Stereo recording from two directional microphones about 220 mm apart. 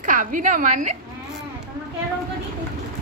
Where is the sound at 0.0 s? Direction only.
35° right (ahead or behind).